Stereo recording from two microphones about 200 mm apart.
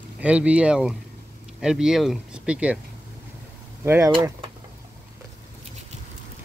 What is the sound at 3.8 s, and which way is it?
Speech, 10° right (ahead or behind).